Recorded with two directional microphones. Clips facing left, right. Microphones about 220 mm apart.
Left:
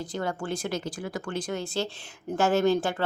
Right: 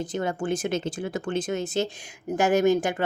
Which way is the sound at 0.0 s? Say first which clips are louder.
Right 4 dB; 20° right (ahead or behind).